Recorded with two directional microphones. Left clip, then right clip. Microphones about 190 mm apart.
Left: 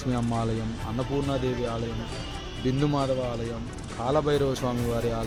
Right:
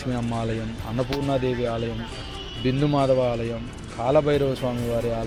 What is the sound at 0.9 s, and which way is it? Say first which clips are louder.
Speech: right 4 dB; 5° right (ahead or behind).